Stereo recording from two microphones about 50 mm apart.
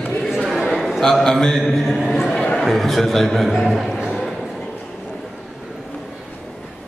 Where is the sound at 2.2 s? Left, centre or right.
Centre.